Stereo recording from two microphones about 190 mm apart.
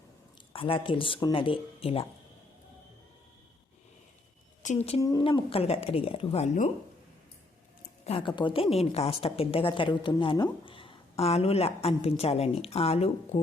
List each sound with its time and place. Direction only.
0.5 s speech: 30° left (ahead or behind)
4.6 s a woman's voice: 35° left (ahead or behind)
4.9 s a woman's voice: 20° left (ahead or behind); by 6.7 s 35° left (ahead or behind)
8.0 s a woman's voice: 30° left (ahead or behind)